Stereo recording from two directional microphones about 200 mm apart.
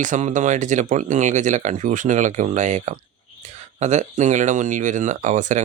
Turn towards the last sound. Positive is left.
turn(degrees=-40)  # may be behind; listen again after turning